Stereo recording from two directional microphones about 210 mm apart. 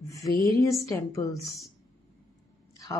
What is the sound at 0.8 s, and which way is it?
Speech, 15° left (ahead or behind).